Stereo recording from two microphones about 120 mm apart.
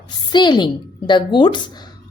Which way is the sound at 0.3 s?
40° left (ahead or behind).